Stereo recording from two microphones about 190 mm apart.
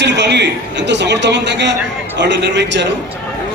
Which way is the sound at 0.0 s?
65° right (ahead or behind).